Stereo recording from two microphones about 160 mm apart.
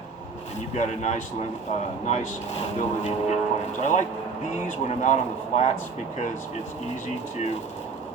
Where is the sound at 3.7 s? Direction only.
50° left (ahead or behind).